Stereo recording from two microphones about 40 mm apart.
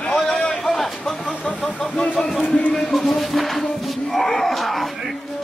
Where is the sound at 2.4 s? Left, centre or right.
Left.